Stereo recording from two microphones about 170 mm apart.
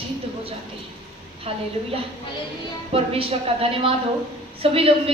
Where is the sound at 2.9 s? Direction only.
35° right (ahead or behind).